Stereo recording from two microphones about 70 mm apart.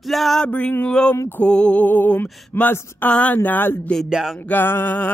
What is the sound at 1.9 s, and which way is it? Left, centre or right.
Music, left.